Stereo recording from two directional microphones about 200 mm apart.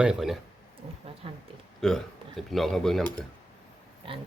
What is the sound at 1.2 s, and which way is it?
Speech, 25° right (ahead or behind).